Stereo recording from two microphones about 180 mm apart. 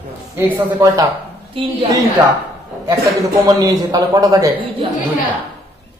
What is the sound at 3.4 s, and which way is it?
A man's voice, 20° right (ahead or behind).